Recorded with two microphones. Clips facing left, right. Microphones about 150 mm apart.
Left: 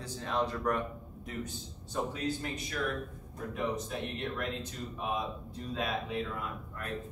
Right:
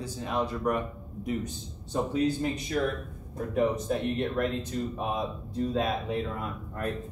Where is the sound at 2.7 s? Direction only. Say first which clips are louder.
Right 7 dB; 30° right (ahead or behind).